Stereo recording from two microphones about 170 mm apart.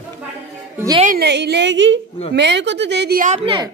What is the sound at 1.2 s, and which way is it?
A woman's voice, 75° right (ahead or behind).